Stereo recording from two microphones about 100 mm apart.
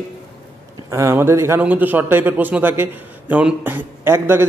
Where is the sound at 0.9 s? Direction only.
30° right (ahead or behind).